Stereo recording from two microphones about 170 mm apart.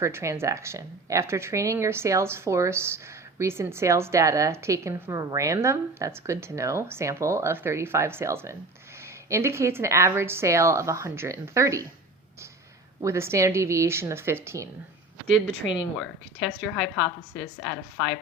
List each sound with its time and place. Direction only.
0.0 s speech: 15° right (ahead or behind)
13.0 s speech: 15° right (ahead or behind)
15.6 s a woman's voice: 10° left (ahead or behind)